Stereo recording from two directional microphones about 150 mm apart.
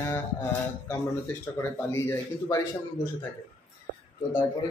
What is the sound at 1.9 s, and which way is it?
Speech, 20° left (ahead or behind).